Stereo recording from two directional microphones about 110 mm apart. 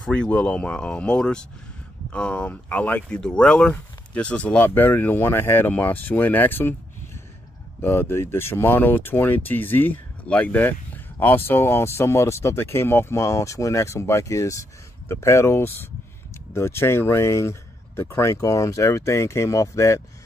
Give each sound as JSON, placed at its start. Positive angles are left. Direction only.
{"t": 0.0, "sound": "speech", "side_deg": 10}
{"t": 7.8, "sound": "speech", "side_deg": 20}